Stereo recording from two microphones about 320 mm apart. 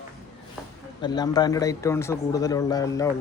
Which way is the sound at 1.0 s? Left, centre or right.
Centre.